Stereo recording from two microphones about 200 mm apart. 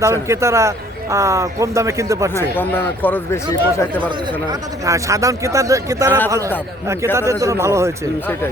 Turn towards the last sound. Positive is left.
turn(degrees=-15)  # may be behind; listen again after turning